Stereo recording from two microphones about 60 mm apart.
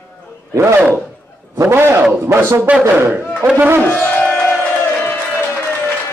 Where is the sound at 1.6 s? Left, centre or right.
Right.